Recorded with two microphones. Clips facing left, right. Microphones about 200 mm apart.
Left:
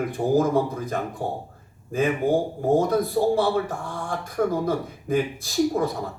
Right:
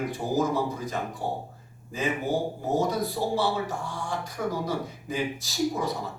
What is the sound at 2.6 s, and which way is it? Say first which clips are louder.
Speech: left 6 dB; 55° left (ahead or behind).